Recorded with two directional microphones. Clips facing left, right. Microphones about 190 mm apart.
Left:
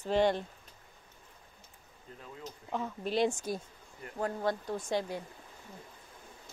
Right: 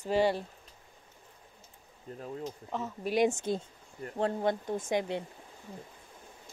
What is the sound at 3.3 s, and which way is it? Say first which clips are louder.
Speech: right 4 dB; 25° right (ahead or behind).